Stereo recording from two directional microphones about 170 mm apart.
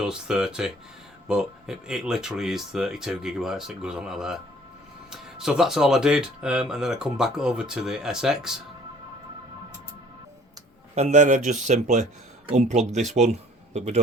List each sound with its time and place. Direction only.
0.0 s speech: 5° right (ahead or behind)
10.9 s a man's voice: 40° right (ahead or behind)